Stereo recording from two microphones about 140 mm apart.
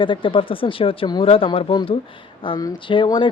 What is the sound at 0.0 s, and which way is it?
Speech, 35° left (ahead or behind).